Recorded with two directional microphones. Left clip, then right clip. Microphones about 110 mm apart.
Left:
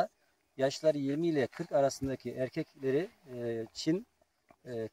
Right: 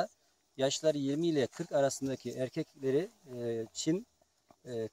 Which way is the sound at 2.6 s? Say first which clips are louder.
Right 1 dB; 5° right (ahead or behind).